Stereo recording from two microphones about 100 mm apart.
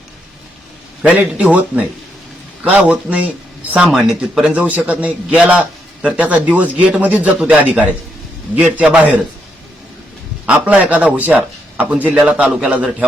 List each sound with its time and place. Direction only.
1.0 s a man's voice: 15° right (ahead or behind)
3.9 s speech: 5° right (ahead or behind)
4.5 s a man's voice: 15° right (ahead or behind)
10.4 s a man's voice: 10° right (ahead or behind)